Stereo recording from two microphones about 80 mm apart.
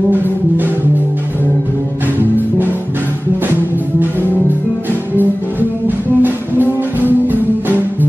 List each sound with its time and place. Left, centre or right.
0.1 s music: right
5.1 s music: right